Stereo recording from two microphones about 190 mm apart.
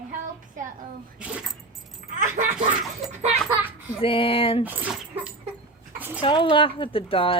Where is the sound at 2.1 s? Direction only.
45° right (ahead or behind).